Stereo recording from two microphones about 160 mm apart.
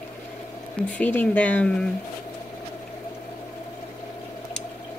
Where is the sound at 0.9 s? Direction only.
10° left (ahead or behind).